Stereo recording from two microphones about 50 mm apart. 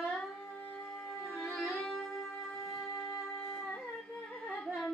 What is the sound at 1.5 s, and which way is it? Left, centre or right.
Music, centre.